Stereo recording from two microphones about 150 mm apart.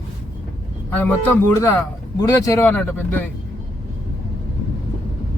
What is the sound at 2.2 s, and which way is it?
A man's voice, 20° left (ahead or behind).